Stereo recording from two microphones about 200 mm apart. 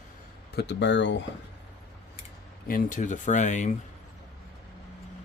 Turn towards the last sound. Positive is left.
turn(degrees=35)  # may be behind; listen again after turning